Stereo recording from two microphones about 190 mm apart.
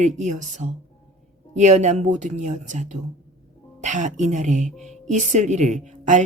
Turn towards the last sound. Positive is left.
turn(degrees=-40)  # may be behind; listen again after turning